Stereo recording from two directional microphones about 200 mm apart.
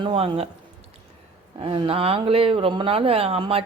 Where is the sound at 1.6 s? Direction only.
25° right (ahead or behind).